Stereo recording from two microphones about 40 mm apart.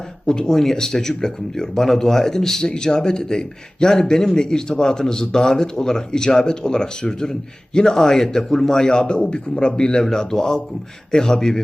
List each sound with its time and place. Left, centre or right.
0.3 s a man's voice: centre
0.5 s a man's voice: centre